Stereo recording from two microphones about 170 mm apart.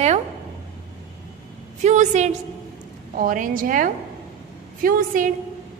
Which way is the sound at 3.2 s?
55° right (ahead or behind).